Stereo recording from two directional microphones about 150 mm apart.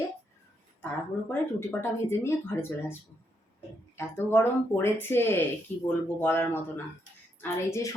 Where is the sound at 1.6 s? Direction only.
15° left (ahead or behind).